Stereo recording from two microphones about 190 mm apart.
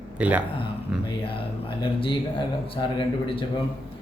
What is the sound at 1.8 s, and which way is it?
Speech, 25° left (ahead or behind).